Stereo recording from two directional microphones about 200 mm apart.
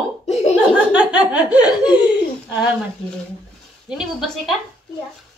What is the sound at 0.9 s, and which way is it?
Speech, 5° right (ahead or behind).